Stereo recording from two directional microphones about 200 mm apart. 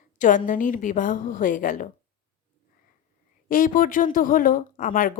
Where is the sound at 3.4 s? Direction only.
45° left (ahead or behind).